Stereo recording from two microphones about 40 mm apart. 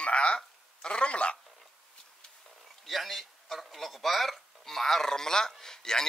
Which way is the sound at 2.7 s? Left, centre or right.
Centre.